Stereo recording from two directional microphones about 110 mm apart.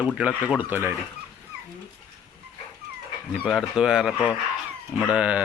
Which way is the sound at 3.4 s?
5° right (ahead or behind).